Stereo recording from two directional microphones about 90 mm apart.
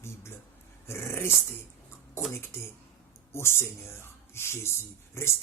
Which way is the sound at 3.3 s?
30° left (ahead or behind).